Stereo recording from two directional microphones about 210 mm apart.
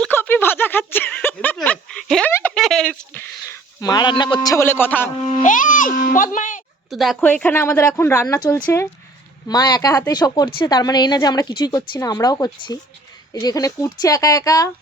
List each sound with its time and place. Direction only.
0.0 s a sound: 10° left (ahead or behind)
3.8 s speech: 20° left (ahead or behind)
5.3 s a child's voice: 35° left (ahead or behind)
6.9 s speech: centre (ahead or behind); by 14.7 s 15° left (ahead or behind)